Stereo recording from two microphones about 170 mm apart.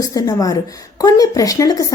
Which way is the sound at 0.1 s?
20° left (ahead or behind).